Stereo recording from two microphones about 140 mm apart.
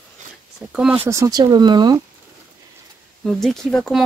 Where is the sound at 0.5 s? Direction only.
5° right (ahead or behind); by 2.0 s 30° right (ahead or behind).